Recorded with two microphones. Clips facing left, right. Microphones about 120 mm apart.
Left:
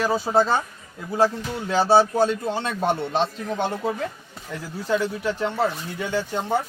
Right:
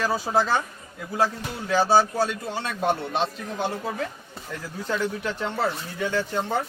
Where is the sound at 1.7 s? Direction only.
30° left (ahead or behind).